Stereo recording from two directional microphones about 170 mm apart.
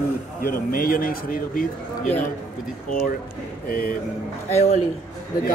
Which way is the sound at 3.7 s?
60° left (ahead or behind).